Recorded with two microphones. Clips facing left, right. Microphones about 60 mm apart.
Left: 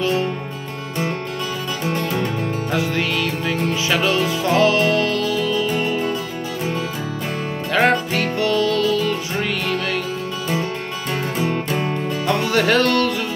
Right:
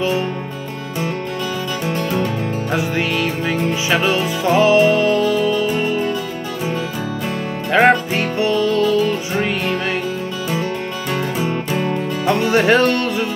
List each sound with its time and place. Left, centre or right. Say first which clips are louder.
2.7 s music: right 2 dB; centre
7.7 s music: right 4 dB; right
12.3 s music: right 4 dB; right